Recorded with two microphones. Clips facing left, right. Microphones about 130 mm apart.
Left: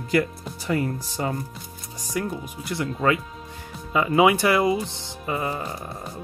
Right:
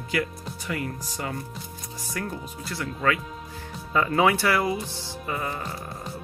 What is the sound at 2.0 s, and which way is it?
Speech, 15° left (ahead or behind).